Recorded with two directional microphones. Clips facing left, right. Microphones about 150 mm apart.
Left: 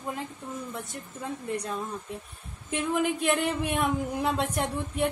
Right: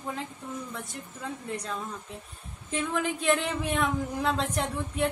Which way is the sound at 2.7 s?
5° left (ahead or behind).